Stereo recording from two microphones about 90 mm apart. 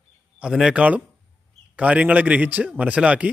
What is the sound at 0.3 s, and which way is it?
A man's voice, 10° right (ahead or behind).